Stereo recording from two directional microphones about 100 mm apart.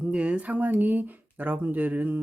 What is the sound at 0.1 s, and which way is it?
Speech, 15° right (ahead or behind).